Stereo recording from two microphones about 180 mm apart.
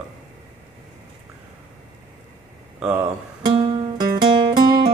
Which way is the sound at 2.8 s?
5° right (ahead or behind).